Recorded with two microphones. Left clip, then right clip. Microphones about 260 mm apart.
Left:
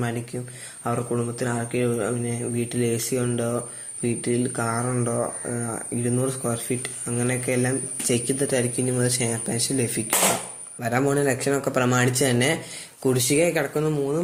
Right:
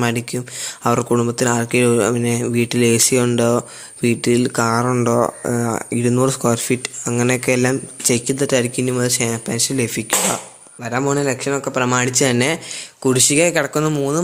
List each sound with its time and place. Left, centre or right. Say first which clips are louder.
0.9 s speech: right 9 dB; right
10.8 s speech: right 3 dB; centre; by 14.2 s right